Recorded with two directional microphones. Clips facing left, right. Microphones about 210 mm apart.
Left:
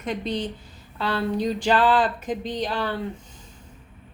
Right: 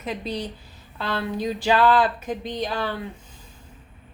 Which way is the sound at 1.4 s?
5° right (ahead or behind).